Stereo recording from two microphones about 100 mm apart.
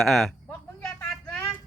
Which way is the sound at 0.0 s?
Centre (ahead or behind).